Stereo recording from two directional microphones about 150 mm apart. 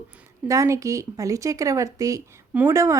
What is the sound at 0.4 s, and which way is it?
Speech, 20° right (ahead or behind).